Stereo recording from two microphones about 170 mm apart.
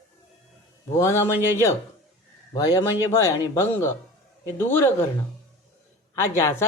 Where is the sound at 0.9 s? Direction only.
15° left (ahead or behind).